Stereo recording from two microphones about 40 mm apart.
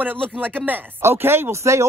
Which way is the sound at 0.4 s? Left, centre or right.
Right.